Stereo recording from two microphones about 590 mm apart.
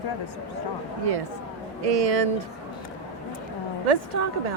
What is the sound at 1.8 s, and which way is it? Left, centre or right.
Speech, right.